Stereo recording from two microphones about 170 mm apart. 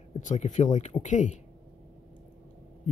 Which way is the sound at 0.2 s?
45° left (ahead or behind).